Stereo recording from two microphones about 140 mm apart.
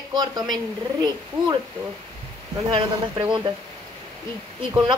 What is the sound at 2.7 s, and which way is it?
Speech, 35° right (ahead or behind).